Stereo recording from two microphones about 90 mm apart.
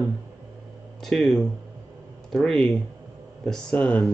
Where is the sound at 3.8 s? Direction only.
15° left (ahead or behind).